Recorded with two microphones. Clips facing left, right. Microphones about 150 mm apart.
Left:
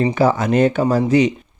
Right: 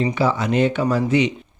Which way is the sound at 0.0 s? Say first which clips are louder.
Left 4 dB; 50° left (ahead or behind).